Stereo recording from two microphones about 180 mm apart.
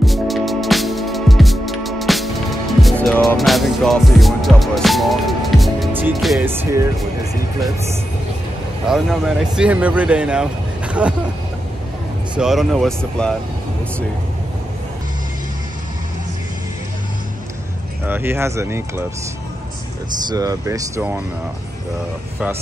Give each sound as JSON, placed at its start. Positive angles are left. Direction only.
{"t": 0.0, "sound": "music", "side_deg": 0}
{"t": 6.4, "sound": "speech", "side_deg": -10}
{"t": 8.8, "sound": "speech", "side_deg": -5}
{"t": 12.4, "sound": "speech", "side_deg": 0}
{"t": 18.0, "sound": "speech", "side_deg": -10}
{"t": 20.2, "sound": "speech", "side_deg": -20}